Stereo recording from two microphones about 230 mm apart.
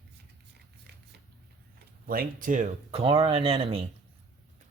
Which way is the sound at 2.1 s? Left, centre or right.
Right.